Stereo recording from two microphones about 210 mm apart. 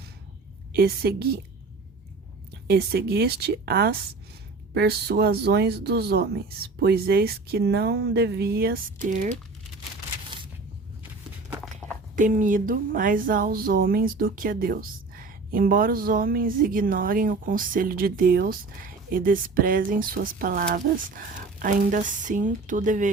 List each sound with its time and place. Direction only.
0.7 s speech: 45° right (ahead or behind)
2.6 s speech: 50° right (ahead or behind)
12.1 s speech: 40° right (ahead or behind)